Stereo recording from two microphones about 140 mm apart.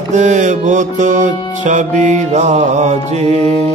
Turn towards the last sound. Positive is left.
turn(degrees=-50)  # may be behind; listen again after turning